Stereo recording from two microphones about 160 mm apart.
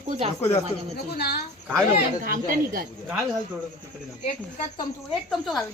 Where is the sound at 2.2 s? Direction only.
60° right (ahead or behind).